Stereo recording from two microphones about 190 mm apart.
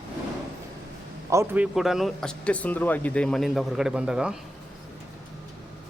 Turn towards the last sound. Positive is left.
turn(degrees=-5)  # may be behind; listen again after turning